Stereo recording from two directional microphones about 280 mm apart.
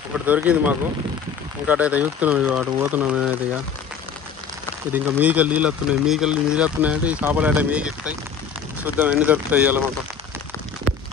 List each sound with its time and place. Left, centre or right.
0.3 s speech: centre
4.9 s speech: centre